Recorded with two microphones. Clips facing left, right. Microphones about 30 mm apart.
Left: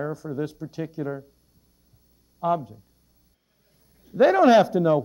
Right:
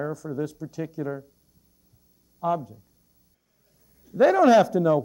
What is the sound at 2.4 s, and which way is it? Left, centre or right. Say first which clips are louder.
Speech: left 2 dB; left.